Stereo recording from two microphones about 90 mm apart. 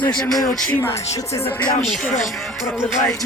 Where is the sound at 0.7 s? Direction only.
25° left (ahead or behind).